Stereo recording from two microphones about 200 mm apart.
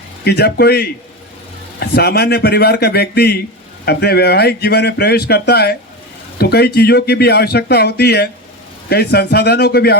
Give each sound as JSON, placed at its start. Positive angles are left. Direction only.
{"t": 0.3, "sound": "speech", "side_deg": 55}